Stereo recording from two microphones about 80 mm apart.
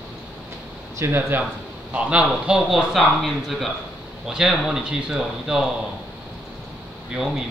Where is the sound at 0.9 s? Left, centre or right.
Right.